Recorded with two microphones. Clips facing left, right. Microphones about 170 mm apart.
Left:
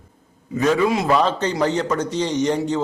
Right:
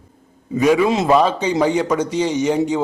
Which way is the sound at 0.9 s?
25° right (ahead or behind).